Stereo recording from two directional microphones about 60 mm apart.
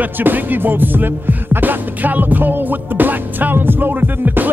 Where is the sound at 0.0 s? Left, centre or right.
Right.